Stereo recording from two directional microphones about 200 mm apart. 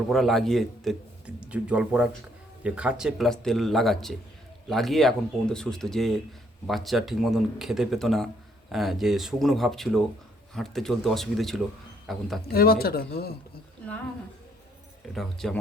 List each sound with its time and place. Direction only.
0.1 s speech: centre (ahead or behind)
12.5 s speech: 50° left (ahead or behind)
15.1 s speech: centre (ahead or behind)